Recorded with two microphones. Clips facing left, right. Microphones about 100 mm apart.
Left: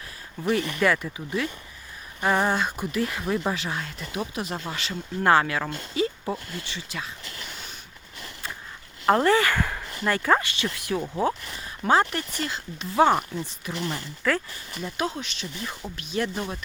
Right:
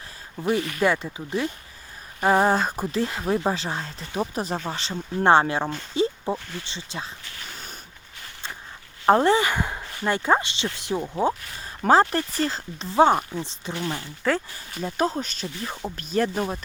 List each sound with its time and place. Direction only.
0.4 s speech: 25° right (ahead or behind)
9.0 s speech: 25° right (ahead or behind)
11.8 s speech: 35° right (ahead or behind)